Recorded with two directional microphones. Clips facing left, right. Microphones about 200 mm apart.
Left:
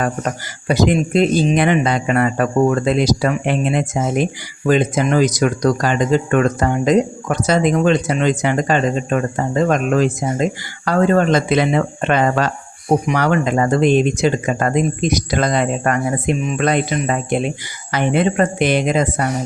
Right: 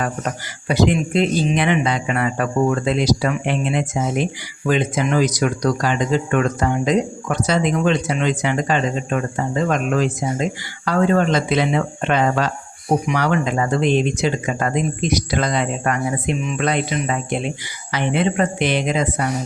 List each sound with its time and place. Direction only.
0.7 s a man's voice: 45° left (ahead or behind)